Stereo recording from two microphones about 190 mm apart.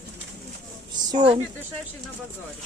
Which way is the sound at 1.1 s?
25° right (ahead or behind).